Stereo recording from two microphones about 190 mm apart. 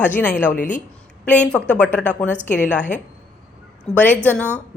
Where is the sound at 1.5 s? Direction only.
5° left (ahead or behind).